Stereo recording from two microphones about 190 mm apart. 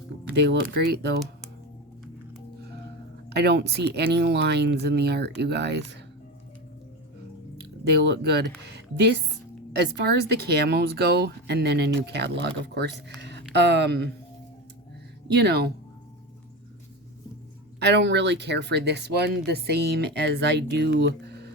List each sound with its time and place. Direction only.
0.3 s speech: 65° right (ahead or behind)
3.2 s speech: 60° right (ahead or behind)
7.6 s speech: 60° right (ahead or behind)
15.3 s speech: 60° right (ahead or behind)
17.7 s speech: 65° right (ahead or behind)